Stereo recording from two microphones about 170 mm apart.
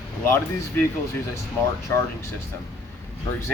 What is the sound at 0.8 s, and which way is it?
Speech, 15° left (ahead or behind).